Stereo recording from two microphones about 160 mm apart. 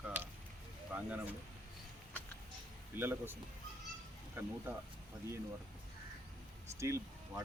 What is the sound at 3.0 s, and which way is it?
Speech, 15° right (ahead or behind).